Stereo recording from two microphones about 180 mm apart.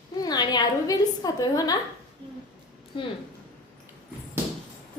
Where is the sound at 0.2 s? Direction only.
25° left (ahead or behind).